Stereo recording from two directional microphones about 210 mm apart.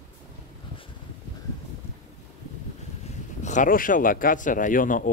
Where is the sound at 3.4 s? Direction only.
35° left (ahead or behind).